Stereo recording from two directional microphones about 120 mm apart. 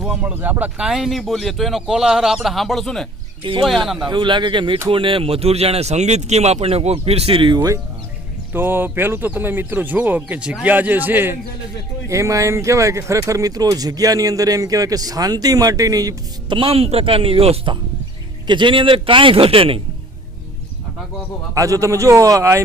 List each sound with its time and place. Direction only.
0.0 s speech: 10° right (ahead or behind)
4.1 s a man's voice: 40° right (ahead or behind)
7.5 s a man's voice: 30° right (ahead or behind)
8.5 s speech: 20° right (ahead or behind)
16.6 s a man's voice: 50° right (ahead or behind)
18.4 s a man's voice: 40° right (ahead or behind)
21.5 s speech: 25° right (ahead or behind)